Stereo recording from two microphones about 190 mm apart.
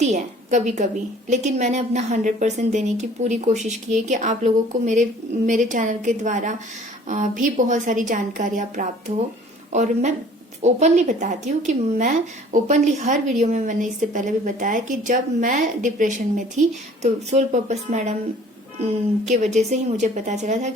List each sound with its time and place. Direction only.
0.0 s a woman's voice: 40° right (ahead or behind)
19.3 s a woman's voice: 40° right (ahead or behind)